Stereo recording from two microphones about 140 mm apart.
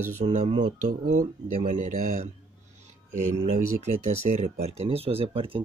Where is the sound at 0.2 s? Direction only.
55° right (ahead or behind).